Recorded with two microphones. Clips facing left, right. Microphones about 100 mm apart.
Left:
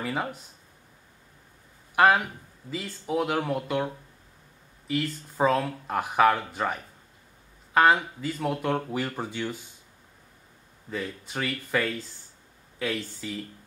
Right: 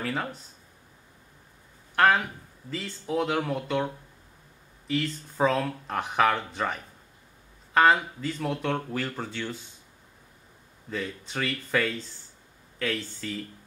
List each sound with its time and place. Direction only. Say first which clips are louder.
0.0 s speech: left 1 dB; 10° left (ahead or behind)
2.0 s speech: left 1 dB; 10° left (ahead or behind)
10.9 s speech: even; 5° left (ahead or behind)